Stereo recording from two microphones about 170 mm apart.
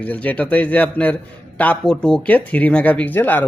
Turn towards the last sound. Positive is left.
turn(degrees=10)  # may be behind; listen again after turning